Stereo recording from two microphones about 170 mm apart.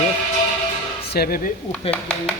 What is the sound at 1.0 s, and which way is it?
Speech, 65° left (ahead or behind).